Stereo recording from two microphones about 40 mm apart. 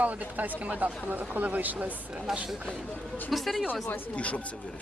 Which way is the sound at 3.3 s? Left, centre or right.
Centre.